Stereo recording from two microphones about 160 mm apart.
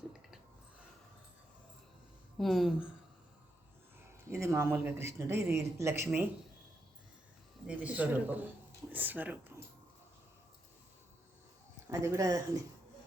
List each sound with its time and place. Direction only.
2.4 s speech: centre (ahead or behind)
4.3 s speech: 20° right (ahead or behind)
7.7 s speech: 10° right (ahead or behind)
11.9 s speech: 20° right (ahead or behind)